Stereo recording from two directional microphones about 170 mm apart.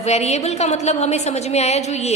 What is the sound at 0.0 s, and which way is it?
A woman's voice, 40° left (ahead or behind).